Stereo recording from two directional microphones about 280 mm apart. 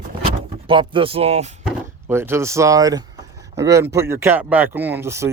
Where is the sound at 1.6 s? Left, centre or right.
Centre.